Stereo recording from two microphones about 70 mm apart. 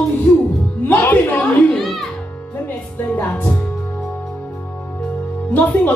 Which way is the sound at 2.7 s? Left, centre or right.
Left.